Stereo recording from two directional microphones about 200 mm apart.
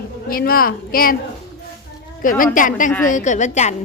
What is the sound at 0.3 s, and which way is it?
Speech, 45° left (ahead or behind).